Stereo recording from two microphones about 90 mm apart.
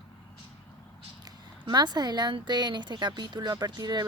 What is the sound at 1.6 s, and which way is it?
Speech, 55° right (ahead or behind).